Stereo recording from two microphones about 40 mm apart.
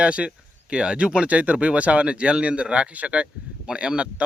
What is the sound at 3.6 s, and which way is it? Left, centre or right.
Speech, right.